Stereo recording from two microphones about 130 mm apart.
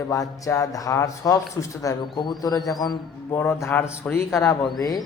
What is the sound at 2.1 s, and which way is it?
Speech, 35° left (ahead or behind).